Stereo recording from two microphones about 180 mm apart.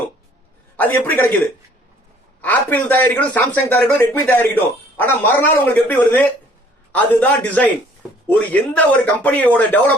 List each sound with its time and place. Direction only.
0.8 s a man's voice: 10° left (ahead or behind)
2.4 s a man's voice: 10° left (ahead or behind)